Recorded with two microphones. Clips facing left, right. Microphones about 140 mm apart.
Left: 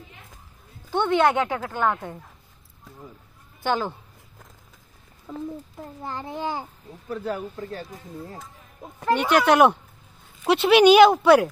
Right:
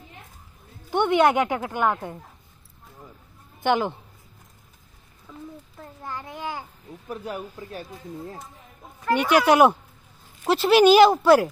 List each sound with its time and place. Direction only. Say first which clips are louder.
0.8 s speech: right 1 dB; 15° right (ahead or behind)
3.6 s a woman's voice: right 3 dB; 20° right (ahead or behind)
5.3 s a child's voice: left 8 dB; 35° left (ahead or behind)
7.1 s speech: left 4 dB; 15° right (ahead or behind)
9.1 s speech: even; 10° right (ahead or behind)